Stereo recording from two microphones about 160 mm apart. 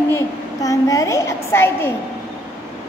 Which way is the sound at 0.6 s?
20° left (ahead or behind).